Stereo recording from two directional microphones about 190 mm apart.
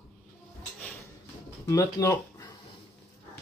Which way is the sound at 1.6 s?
15° left (ahead or behind).